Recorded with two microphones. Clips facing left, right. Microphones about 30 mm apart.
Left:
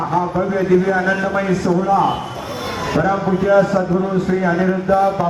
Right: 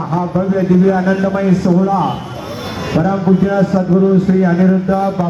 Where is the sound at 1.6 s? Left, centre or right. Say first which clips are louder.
Right 3 dB; centre.